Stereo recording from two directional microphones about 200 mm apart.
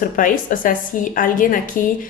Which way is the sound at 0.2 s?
40° left (ahead or behind).